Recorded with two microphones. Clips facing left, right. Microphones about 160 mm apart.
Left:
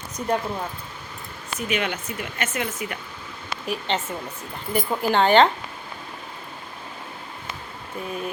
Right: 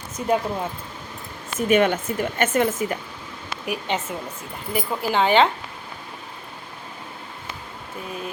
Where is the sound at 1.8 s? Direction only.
50° right (ahead or behind).